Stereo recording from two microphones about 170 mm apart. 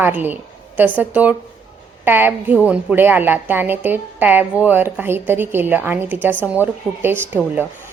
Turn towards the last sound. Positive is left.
turn(degrees=-10)  # may be behind; listen again after turning